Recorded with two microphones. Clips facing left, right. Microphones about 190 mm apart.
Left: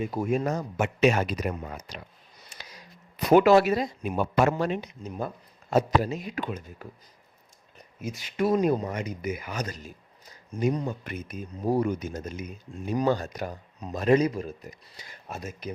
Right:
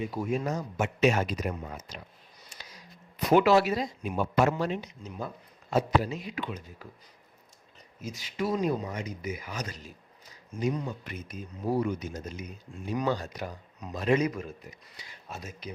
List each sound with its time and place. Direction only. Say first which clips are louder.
0.0 s a man's voice: left 4 dB; 50° left (ahead or behind); by 2.0 s 70° left (ahead or behind)
2.5 s a sound: left 3 dB; 75° left (ahead or behind)
3.2 s speech: left 4 dB; 50° left (ahead or behind)
8.0 s a man's voice: left 5 dB; 55° left (ahead or behind)
10.5 s speech: left 4 dB; 35° left (ahead or behind)
11.0 s speech: left 4 dB; 55° left (ahead or behind)